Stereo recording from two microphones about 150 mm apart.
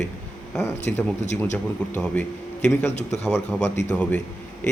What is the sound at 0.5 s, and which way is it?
Speech, 15° left (ahead or behind).